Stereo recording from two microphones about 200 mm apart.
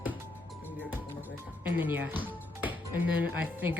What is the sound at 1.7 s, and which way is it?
Speech, 10° right (ahead or behind).